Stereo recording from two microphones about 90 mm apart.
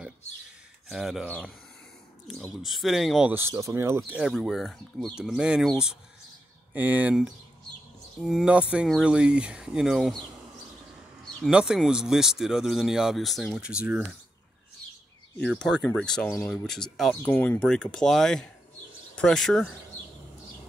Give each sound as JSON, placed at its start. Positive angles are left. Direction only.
{"t": 0.8, "sound": "speech", "side_deg": -5}
{"t": 1.2, "sound": "speech", "side_deg": 15}
{"t": 2.2, "sound": "speech", "side_deg": 0}
{"t": 3.3, "sound": "speech", "side_deg": -25}
{"t": 4.3, "sound": "speech", "side_deg": 0}
{"t": 6.7, "sound": "speech", "side_deg": -20}
{"t": 8.2, "sound": "speech", "side_deg": 0}
{"t": 8.5, "sound": "speech", "side_deg": -15}
{"t": 11.5, "sound": "speech", "side_deg": -5}
{"t": 13.6, "sound": "speech", "side_deg": -10}
{"t": 15.6, "sound": "speech", "side_deg": 10}
{"t": 17.1, "sound": "speech", "side_deg": 20}